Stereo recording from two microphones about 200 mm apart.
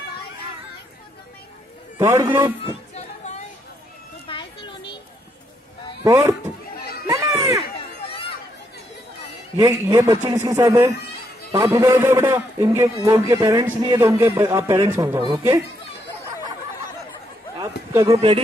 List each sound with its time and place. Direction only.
2.0 s a man's voice: 10° right (ahead or behind)
2.6 s a sound: 35° left (ahead or behind)
4.3 s children playing: 25° left (ahead or behind)
6.0 s a man's voice: 15° right (ahead or behind)
7.1 s a sound: 15° right (ahead or behind)
8.1 s chatter: 30° left (ahead or behind)
9.6 s a man's voice: 15° right (ahead or behind)
17.9 s a man's voice: 15° right (ahead or behind)